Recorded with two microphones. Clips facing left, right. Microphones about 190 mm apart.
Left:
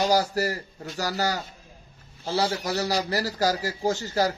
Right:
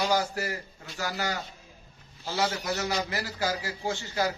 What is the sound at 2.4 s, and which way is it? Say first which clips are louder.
A man's voice: left 3 dB; 35° left (ahead or behind).